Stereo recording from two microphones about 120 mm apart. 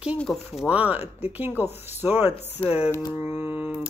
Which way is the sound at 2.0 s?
15° right (ahead or behind).